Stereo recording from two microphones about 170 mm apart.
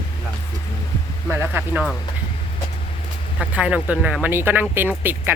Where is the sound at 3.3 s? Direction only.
5° right (ahead or behind).